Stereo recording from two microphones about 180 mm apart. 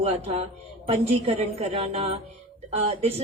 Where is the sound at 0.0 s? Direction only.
35° right (ahead or behind).